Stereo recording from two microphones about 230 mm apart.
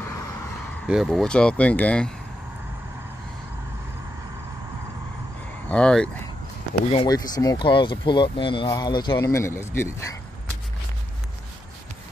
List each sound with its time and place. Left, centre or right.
0.8 s speech: centre
5.7 s speech: centre
6.9 s speech: left